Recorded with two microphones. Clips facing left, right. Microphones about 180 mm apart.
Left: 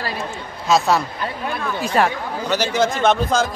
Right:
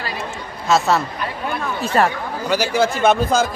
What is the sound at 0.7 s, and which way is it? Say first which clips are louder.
A man's voice: even; centre (ahead or behind).